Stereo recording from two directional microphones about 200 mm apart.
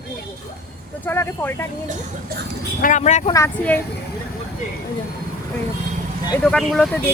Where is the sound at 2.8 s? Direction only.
40° left (ahead or behind).